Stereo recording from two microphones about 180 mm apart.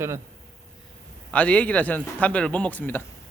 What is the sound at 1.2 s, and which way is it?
Speech, 5° left (ahead or behind).